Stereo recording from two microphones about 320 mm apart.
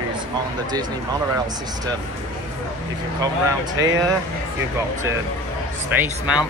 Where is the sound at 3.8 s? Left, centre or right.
Centre.